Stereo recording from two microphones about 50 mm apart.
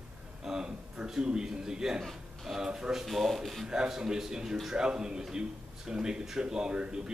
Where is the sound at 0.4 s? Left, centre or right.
Centre.